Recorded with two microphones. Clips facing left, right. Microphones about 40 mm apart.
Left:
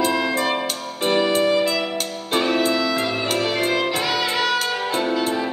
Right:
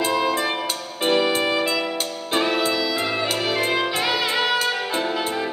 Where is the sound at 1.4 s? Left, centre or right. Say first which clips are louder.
Left 3 dB; centre.